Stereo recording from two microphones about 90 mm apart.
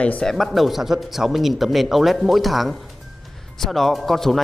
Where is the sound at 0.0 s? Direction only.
10° left (ahead or behind).